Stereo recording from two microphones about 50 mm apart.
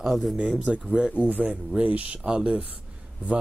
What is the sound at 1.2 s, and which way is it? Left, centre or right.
Speech, right.